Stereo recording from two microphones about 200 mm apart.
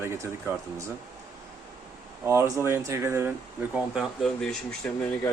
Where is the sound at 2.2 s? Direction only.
15° right (ahead or behind); by 5.3 s 5° left (ahead or behind).